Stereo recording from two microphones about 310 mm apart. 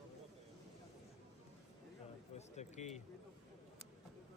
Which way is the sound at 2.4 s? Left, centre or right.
Left.